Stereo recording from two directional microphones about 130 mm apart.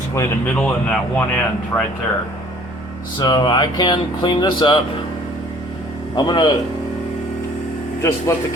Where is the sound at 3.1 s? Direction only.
35° left (ahead or behind).